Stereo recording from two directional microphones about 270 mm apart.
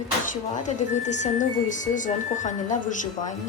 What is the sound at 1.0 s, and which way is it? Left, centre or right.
Speech, left.